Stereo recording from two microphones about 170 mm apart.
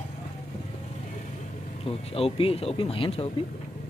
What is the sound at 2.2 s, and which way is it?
Speech, 35° left (ahead or behind).